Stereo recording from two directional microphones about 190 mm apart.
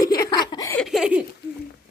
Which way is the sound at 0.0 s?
20° left (ahead or behind).